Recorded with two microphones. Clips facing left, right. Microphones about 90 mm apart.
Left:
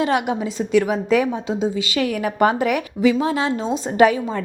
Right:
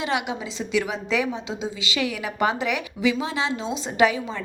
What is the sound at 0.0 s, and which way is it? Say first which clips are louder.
A woman's voice: left 6 dB; 45° left (ahead or behind).